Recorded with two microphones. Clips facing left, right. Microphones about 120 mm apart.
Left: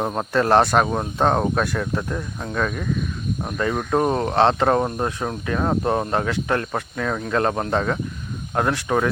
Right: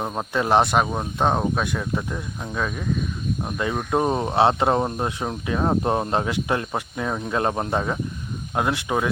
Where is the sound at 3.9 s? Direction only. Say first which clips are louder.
Left 1 dB; 10° right (ahead or behind).